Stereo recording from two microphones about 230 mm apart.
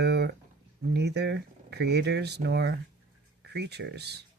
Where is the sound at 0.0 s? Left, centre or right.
Right.